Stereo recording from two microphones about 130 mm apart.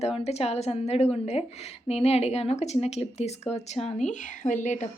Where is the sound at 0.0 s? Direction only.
55° left (ahead or behind).